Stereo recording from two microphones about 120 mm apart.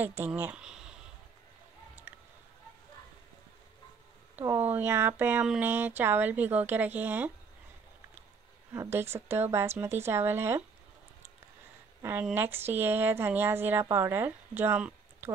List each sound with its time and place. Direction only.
0.0 s speech: 15° right (ahead or behind)
2.1 s a sound: 15° right (ahead or behind)
4.4 s speech: 15° right (ahead or behind)
8.7 s speech: 20° right (ahead or behind)
12.0 s speech: 20° right (ahead or behind)